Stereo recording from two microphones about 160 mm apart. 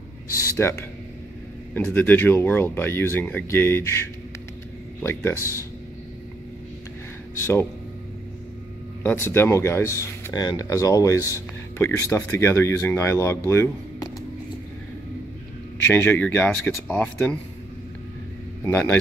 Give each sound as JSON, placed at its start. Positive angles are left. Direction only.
{"t": 0.3, "sound": "speech", "side_deg": 15}
{"t": 9.0, "sound": "speech", "side_deg": 15}
{"t": 13.5, "sound": "a sound", "side_deg": 20}
{"t": 15.9, "sound": "speech", "side_deg": 15}
{"t": 18.6, "sound": "speech", "side_deg": 15}